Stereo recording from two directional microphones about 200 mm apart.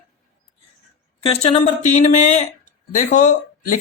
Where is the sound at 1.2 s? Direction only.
30° left (ahead or behind).